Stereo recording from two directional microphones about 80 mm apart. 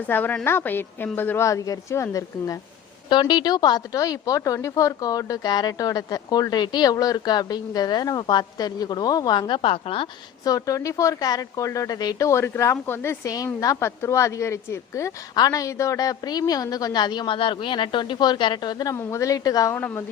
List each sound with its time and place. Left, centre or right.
0.1 s a woman's voice: left
1.5 s a woman's voice: left
3.1 s a woman's voice: left
10.4 s a woman's voice: left
12.3 s a woman's voice: left
13.2 s a woman's voice: left
15.4 s a woman's voice: left
18.9 s a woman's voice: left